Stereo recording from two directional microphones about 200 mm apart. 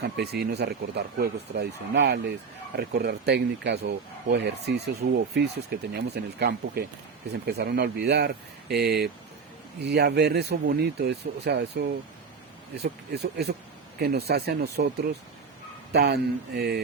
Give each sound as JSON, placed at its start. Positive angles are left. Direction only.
{"t": 0.0, "sound": "speech", "side_deg": -55}